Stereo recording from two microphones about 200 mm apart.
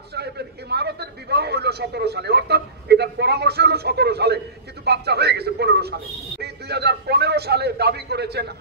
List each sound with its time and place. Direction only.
0.1 s a man's voice: 55° right (ahead or behind)